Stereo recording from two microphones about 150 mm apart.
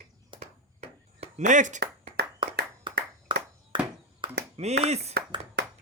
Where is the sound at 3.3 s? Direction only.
30° right (ahead or behind).